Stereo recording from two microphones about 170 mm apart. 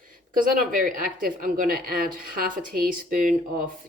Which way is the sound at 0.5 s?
55° right (ahead or behind).